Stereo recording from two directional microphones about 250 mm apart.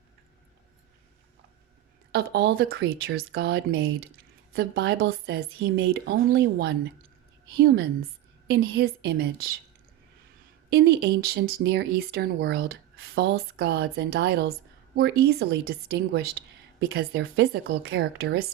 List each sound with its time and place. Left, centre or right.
2.1 s speech: right
10.7 s speech: right